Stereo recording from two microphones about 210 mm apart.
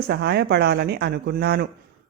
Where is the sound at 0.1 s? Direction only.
50° right (ahead or behind).